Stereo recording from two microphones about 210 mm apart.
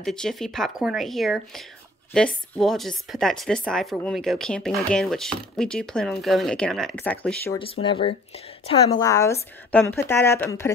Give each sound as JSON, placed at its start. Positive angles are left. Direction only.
{"t": 0.0, "sound": "speech", "side_deg": 0}
{"t": 7.5, "sound": "a woman's voice", "side_deg": 25}